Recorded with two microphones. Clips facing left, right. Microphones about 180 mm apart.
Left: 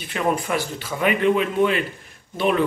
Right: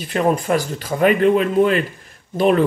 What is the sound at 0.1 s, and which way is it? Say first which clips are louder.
Speech: right 5 dB; 40° right (ahead or behind).